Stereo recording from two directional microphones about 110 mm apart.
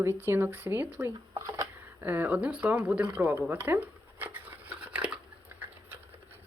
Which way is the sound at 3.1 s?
15° right (ahead or behind).